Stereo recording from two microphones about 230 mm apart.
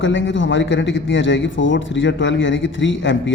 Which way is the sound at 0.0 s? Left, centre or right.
Left.